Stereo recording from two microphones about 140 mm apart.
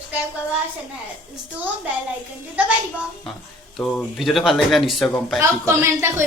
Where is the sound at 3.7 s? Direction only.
Centre (ahead or behind).